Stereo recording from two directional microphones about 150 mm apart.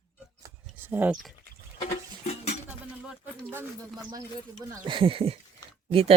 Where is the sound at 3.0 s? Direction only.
15° right (ahead or behind).